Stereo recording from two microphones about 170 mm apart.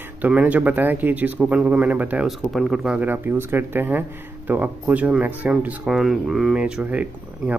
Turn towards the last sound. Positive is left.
turn(degrees=-10)  # may be behind; listen again after turning